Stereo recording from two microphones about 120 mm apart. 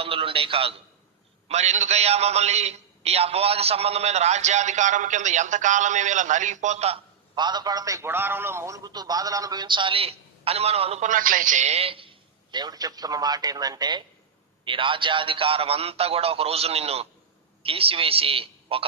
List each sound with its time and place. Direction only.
0.0 s a sound: 50° right (ahead or behind)
1.5 s a man's voice: 70° right (ahead or behind)
7.3 s a man's voice: 35° right (ahead or behind); by 11.0 s 60° right (ahead or behind)
11.0 s a man's voice: 90° right; by 18.9 s 50° right (ahead or behind)